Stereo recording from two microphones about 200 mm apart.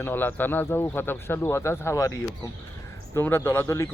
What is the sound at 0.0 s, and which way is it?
Speech, 10° left (ahead or behind).